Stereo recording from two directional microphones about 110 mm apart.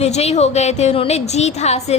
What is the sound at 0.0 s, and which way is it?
A woman's voice, 80° left.